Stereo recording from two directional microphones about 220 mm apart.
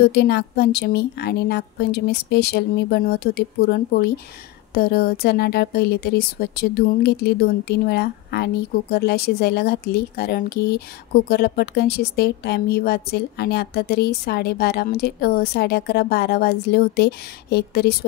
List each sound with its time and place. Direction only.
0.1 s a woman's voice: 45° left (ahead or behind)